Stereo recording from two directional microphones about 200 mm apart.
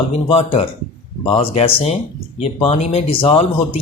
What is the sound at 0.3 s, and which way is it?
Speech, 30° left (ahead or behind).